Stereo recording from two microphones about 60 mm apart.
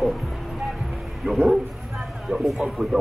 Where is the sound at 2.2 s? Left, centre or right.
Centre.